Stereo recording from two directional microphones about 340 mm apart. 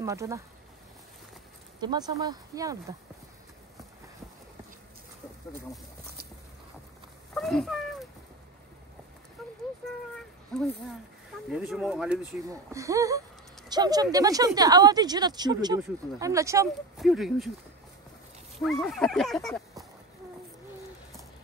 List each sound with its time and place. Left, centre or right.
0.0 s speech: centre
1.8 s speech: centre
7.3 s a sound: centre
9.4 s a sound: centre
10.5 s speech: centre
18.6 s speech: centre